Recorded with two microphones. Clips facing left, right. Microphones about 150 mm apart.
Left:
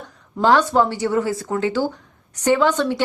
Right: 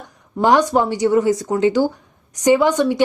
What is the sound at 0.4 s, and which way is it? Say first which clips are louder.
A woman's voice: right 1 dB; 15° right (ahead or behind).